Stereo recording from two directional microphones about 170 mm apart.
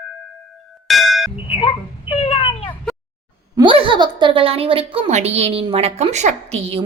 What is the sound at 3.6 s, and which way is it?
A woman's voice, 30° right (ahead or behind).